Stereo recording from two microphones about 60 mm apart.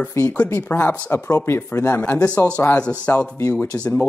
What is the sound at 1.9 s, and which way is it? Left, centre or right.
Speech, left.